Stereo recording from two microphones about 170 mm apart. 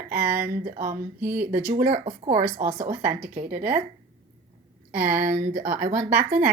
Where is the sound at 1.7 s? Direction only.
45° right (ahead or behind).